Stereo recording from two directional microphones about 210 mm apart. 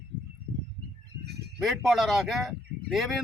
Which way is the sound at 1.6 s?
Centre (ahead or behind).